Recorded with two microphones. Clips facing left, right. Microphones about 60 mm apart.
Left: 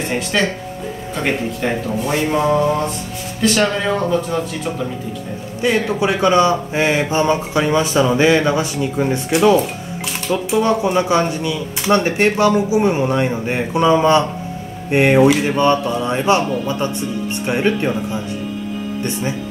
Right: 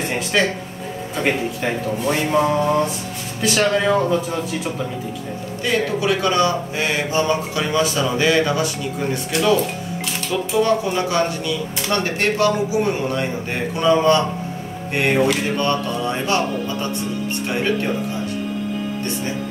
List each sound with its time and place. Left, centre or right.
0.0 s speech: centre
5.6 s a man's voice: left
10.6 s a man's voice: left